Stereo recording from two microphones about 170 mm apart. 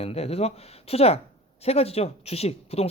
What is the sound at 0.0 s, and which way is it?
Speech, 35° left (ahead or behind).